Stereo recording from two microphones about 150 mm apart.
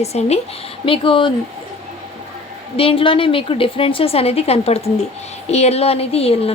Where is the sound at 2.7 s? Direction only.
35° left (ahead or behind).